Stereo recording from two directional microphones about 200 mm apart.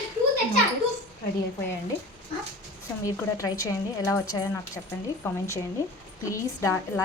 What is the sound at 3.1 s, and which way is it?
A woman's voice, 15° left (ahead or behind).